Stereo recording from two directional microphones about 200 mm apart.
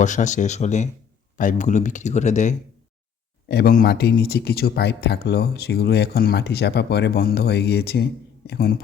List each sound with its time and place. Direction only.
0.0 s speech: 35° left (ahead or behind)